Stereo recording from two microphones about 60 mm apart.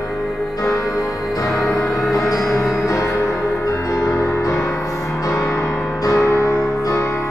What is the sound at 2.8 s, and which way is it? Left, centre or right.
Music, left.